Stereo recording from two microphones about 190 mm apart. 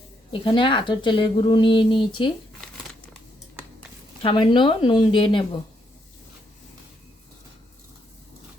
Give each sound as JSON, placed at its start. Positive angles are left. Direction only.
{"t": 0.3, "sound": "a woman's voice", "side_deg": 25}
{"t": 4.2, "sound": "a woman's voice", "side_deg": 25}